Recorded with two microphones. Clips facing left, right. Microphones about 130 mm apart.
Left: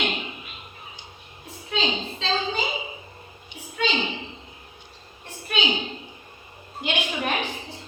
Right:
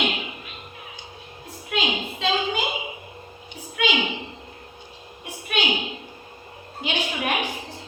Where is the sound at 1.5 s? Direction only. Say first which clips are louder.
Even; 10° right (ahead or behind).